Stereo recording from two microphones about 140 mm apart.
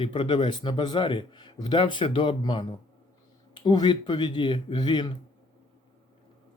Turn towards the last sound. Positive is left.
turn(degrees=30)  # may be behind; listen again after turning